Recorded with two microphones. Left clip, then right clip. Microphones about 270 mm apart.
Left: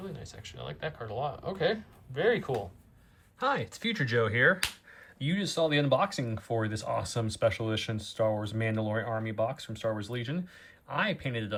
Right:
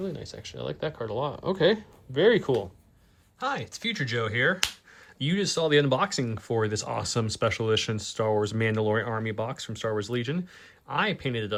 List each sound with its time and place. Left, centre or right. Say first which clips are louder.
0.0 s speech: right 8 dB; right
3.4 s speech: even; centre
5.2 s speech: right 3 dB; right